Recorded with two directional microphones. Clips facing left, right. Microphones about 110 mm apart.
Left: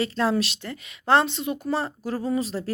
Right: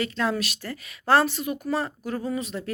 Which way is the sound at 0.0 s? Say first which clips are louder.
Left 3 dB; 30° left (ahead or behind).